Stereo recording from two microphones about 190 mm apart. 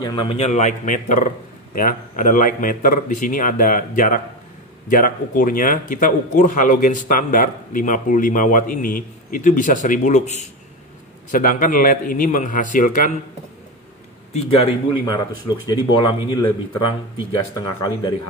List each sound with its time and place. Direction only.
0.0 s a man's voice: 25° left (ahead or behind); by 13.1 s 45° left (ahead or behind)
14.3 s speech: 30° left (ahead or behind)